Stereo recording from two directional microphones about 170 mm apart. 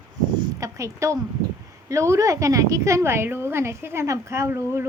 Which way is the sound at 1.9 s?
15° right (ahead or behind).